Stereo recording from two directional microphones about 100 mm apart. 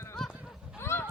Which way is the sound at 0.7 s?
20° left (ahead or behind).